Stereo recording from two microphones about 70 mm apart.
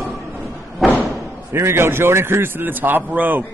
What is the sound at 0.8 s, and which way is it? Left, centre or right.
Slam, centre.